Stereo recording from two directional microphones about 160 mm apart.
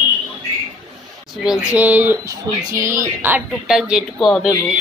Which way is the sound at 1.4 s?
5° right (ahead or behind).